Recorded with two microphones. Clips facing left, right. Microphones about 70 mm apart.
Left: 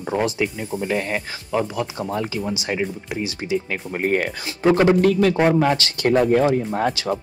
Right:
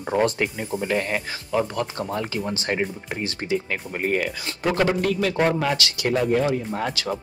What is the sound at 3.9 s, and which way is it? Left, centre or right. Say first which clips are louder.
Speech: left 3 dB; left.